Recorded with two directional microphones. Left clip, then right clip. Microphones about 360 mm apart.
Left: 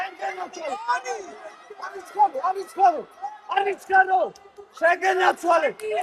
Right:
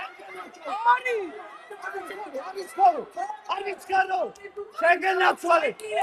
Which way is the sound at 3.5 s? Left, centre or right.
Left.